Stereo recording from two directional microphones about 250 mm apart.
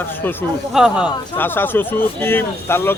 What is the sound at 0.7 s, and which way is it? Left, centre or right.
Speech, centre.